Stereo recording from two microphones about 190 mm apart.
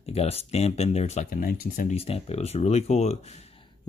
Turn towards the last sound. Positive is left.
turn(degrees=35)  # may be behind; listen again after turning